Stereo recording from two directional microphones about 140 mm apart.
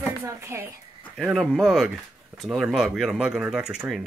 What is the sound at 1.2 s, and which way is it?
Speech, 5° right (ahead or behind).